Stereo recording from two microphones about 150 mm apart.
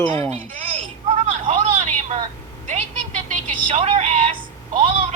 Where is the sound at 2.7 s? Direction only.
55° right (ahead or behind).